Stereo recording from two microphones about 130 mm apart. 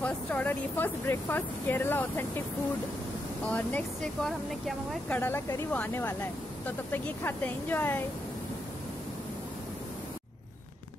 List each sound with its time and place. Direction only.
0.0 s speech: 15° left (ahead or behind)
3.4 s speech: 10° left (ahead or behind)
5.0 s speech: 15° left (ahead or behind)